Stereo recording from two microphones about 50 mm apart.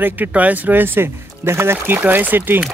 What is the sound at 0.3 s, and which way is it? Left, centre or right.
Speech, right.